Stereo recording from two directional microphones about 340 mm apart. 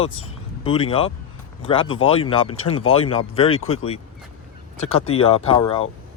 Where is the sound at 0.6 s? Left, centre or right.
Centre.